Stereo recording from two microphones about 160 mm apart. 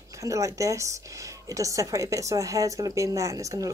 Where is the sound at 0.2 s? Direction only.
20° right (ahead or behind).